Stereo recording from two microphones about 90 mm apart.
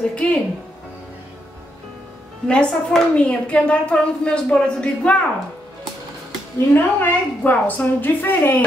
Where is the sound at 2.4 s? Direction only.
10° left (ahead or behind).